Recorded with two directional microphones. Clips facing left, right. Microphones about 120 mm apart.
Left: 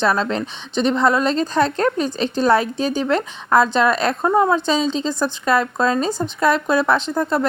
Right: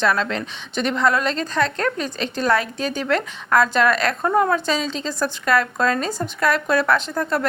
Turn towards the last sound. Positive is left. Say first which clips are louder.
# left 3 dB
turn(degrees=20)  # may be behind; listen again after turning